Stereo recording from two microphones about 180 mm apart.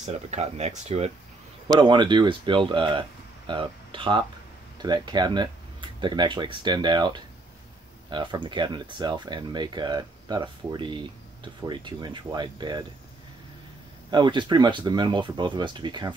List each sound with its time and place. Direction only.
0.0 s speech: 40° right (ahead or behind)
1.8 s speech: 25° right (ahead or behind)
14.1 s speech: 25° right (ahead or behind)